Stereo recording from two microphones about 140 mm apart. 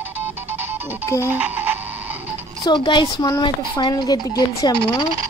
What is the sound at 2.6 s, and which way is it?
Speech, 35° left (ahead or behind).